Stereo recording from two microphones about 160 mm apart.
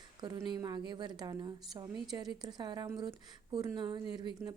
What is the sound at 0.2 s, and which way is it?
A woman's voice, 25° right (ahead or behind).